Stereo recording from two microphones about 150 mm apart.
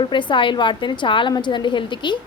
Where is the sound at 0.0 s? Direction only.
30° left (ahead or behind).